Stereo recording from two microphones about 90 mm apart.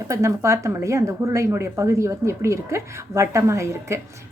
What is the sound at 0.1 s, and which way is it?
Speech, 35° right (ahead or behind).